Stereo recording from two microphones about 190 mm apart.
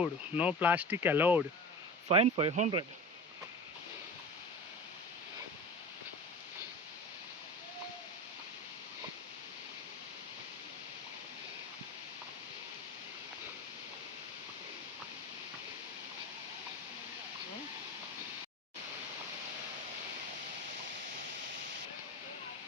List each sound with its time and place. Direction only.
0.0 s speech: 5° right (ahead or behind)
2.0 s speech: 30° right (ahead or behind)